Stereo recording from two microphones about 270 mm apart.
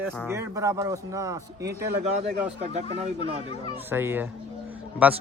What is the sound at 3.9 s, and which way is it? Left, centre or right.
Speech, centre.